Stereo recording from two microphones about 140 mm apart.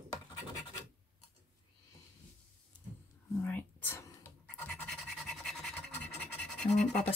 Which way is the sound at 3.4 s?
15° left (ahead or behind).